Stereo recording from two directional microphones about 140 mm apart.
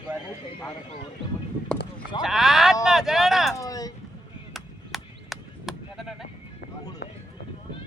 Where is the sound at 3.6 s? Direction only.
25° left (ahead or behind).